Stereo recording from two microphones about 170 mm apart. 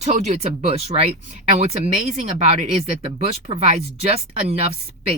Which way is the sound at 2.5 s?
40° right (ahead or behind).